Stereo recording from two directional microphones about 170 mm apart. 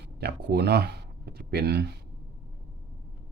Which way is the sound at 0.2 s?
70° right (ahead or behind).